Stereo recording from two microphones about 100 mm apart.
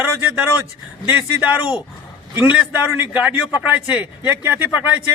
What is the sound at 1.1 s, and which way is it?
A man's voice, 10° right (ahead or behind).